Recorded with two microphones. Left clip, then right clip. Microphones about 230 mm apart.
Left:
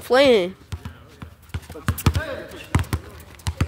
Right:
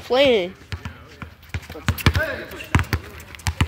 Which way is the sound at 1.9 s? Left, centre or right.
Left.